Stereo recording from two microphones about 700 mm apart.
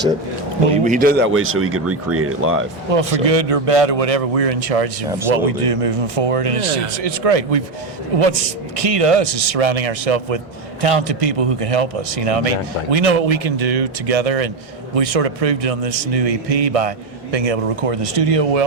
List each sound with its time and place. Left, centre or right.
0.9 s speech: centre
2.9 s speech: right